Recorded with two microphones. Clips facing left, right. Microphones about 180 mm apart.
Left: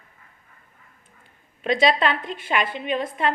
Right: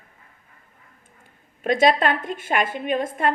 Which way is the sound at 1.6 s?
50° right (ahead or behind).